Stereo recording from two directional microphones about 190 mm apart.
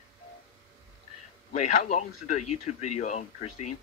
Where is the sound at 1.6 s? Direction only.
40° left (ahead or behind).